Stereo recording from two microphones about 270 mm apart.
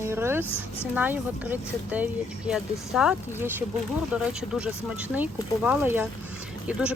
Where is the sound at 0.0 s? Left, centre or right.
Centre.